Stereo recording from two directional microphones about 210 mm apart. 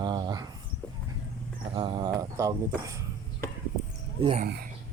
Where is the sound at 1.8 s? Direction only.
20° right (ahead or behind).